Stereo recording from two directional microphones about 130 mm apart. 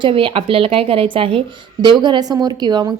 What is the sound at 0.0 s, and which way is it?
A woman's voice, 40° right (ahead or behind).